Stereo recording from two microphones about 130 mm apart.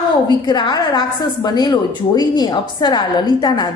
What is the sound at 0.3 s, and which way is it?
A woman's voice, 35° left (ahead or behind).